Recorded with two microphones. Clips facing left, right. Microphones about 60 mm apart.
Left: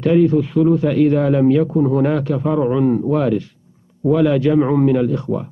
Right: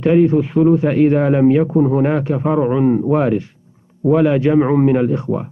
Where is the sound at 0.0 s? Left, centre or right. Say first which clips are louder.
Right 1 dB; right.